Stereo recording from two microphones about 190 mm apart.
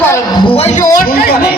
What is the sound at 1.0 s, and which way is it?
Speech, 55° left (ahead or behind).